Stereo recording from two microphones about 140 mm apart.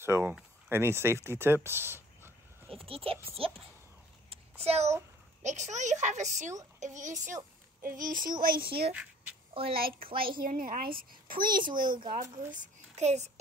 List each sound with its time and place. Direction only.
0.0 s speech: 15° right (ahead or behind)
2.8 s speech: 40° right (ahead or behind)
4.3 s a sound: 45° right (ahead or behind)
5.4 s a child's voice: 60° right (ahead or behind)
7.8 s speech: 75° right (ahead or behind)
9.5 s a woman's voice: 40° right (ahead or behind)
9.8 s a child's voice: 90° right
12.1 s a child's voice: 70° right (ahead or behind)